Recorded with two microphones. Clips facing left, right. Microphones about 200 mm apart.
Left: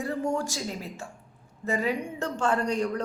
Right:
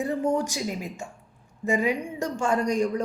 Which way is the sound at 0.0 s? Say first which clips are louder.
Right 4 dB; 20° right (ahead or behind).